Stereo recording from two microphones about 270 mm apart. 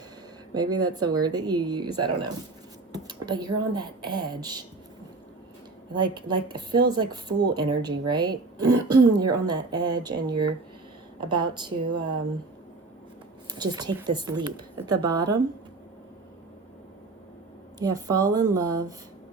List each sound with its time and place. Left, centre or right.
0.5 s speech: centre
5.9 s speech: centre
13.5 s speech: centre
17.7 s speech: centre